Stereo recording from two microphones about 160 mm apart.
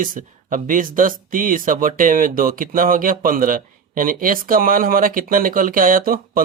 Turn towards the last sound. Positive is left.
turn(degrees=-65)  # may be behind; listen again after turning